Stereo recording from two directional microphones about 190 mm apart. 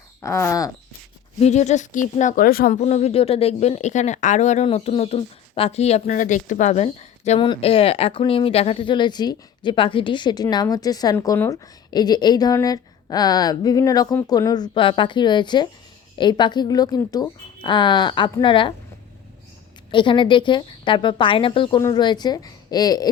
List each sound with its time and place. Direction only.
0.2 s a sound: 15° left (ahead or behind)
1.4 s speech: 35° left (ahead or behind)
2.8 s speech: 35° left (ahead or behind)
19.9 s speech: 25° left (ahead or behind)